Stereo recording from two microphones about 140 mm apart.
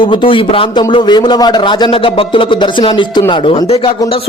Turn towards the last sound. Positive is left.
turn(degrees=35)  # may be behind; listen again after turning